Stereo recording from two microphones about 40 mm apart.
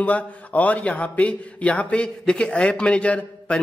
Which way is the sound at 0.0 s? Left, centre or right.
Left.